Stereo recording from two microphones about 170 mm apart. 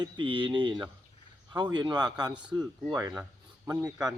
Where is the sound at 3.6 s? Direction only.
20° right (ahead or behind).